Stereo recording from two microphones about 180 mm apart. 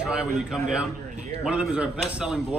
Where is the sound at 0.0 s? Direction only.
5° right (ahead or behind).